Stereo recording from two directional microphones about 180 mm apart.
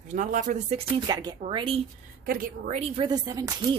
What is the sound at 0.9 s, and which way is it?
Speech, 20° right (ahead or behind).